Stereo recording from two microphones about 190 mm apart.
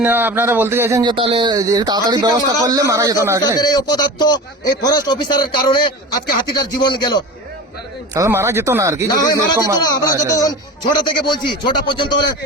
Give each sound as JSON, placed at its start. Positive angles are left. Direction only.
{"t": 0.0, "sound": "speech", "side_deg": -10}
{"t": 1.1, "sound": "speech", "side_deg": -25}
{"t": 3.6, "sound": "speech", "side_deg": 20}
{"t": 8.1, "sound": "speech", "side_deg": -15}
{"t": 10.3, "sound": "speech", "side_deg": 20}